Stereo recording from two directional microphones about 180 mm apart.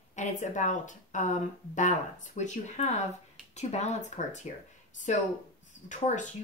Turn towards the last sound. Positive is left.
turn(degrees=45)  # may be behind; listen again after turning